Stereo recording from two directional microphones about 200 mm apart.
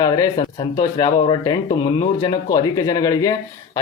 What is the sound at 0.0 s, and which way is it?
A man's voice, 20° left (ahead or behind).